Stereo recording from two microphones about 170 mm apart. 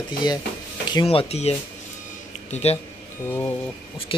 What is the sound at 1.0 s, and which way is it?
Speech, 35° left (ahead or behind).